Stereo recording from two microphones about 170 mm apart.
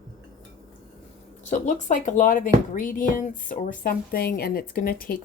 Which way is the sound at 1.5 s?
45° left (ahead or behind).